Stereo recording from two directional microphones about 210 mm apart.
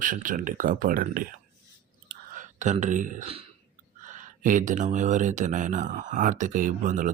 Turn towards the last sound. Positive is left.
turn(degrees=-40)  # may be behind; listen again after turning